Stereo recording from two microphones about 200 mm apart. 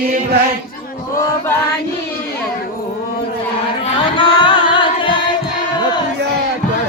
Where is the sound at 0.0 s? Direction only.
50° right (ahead or behind).